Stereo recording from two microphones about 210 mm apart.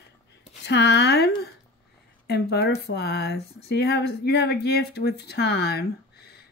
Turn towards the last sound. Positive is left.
turn(degrees=50)  # may be behind; listen again after turning